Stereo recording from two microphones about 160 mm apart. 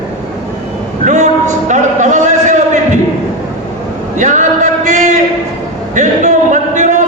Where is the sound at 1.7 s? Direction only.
50° right (ahead or behind).